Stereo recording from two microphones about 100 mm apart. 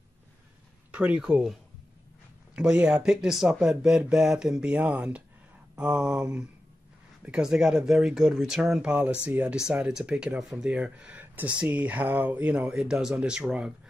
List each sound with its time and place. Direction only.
0.9 s speech: 10° right (ahead or behind)